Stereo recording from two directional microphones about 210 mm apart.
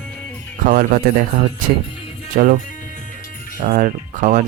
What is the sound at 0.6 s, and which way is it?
Speech, 40° right (ahead or behind).